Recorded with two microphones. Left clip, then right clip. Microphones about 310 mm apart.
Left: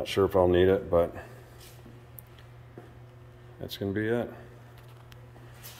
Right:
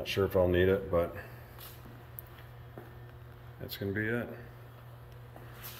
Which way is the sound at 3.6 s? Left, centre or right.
Centre.